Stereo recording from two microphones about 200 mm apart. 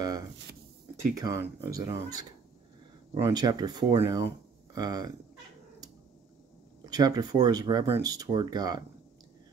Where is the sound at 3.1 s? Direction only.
20° right (ahead or behind).